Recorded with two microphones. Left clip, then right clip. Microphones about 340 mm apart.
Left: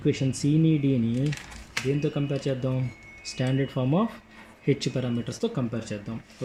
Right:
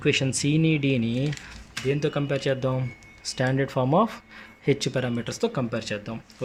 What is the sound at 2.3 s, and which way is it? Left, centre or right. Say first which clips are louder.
Speech: right 4 dB; right.